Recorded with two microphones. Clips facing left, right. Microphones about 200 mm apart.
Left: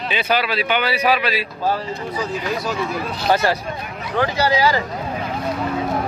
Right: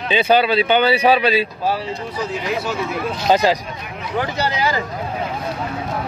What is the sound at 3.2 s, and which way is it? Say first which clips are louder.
Speech: right 3 dB; 15° right (ahead or behind).